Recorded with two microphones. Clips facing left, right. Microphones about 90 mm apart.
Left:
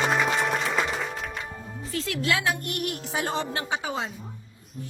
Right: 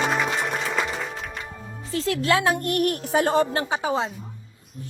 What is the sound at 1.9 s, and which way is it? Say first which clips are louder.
A woman's voice: right 5 dB; 35° right (ahead or behind).